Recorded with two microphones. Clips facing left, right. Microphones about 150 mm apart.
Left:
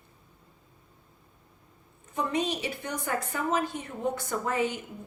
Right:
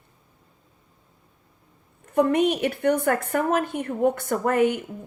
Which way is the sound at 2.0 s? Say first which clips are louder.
Right 10 dB; 55° right (ahead or behind).